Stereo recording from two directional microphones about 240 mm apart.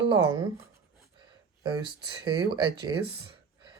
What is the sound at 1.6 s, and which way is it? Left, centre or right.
Speech, centre.